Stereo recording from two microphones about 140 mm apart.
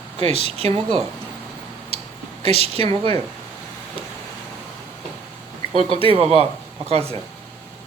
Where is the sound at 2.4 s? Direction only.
45° right (ahead or behind).